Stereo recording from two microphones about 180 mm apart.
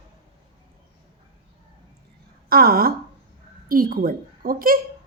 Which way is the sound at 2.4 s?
55° right (ahead or behind).